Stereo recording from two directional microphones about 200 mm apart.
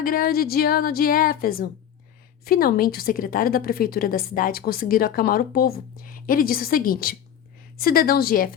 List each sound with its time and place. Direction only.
0.0 s a woman's voice: 45° left (ahead or behind)